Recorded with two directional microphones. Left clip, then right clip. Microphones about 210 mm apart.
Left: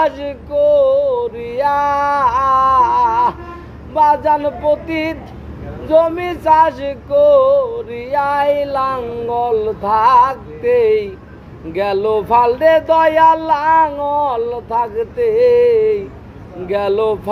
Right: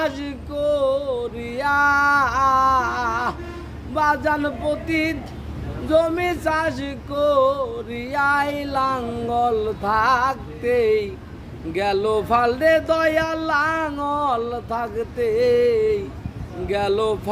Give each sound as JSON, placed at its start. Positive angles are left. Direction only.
{"t": 0.0, "sound": "music", "side_deg": -20}